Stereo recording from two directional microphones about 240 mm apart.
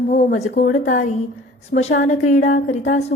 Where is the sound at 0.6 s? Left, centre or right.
Left.